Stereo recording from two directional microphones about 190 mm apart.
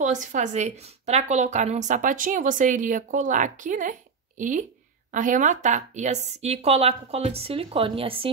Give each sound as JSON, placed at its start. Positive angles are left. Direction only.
{"t": 0.0, "sound": "a woman's voice", "side_deg": -40}